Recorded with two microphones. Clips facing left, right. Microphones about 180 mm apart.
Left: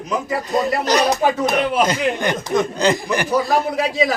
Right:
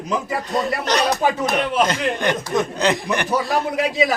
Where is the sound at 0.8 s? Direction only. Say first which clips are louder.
Left 2 dB; 5° left (ahead or behind).